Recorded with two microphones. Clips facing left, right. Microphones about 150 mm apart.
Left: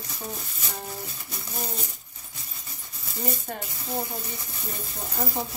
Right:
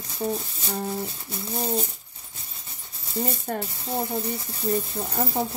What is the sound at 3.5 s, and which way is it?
Speech, 50° right (ahead or behind).